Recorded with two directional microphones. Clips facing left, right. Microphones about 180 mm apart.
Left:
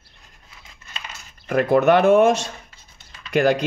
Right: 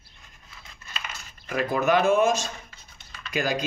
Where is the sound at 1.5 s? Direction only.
65° left (ahead or behind).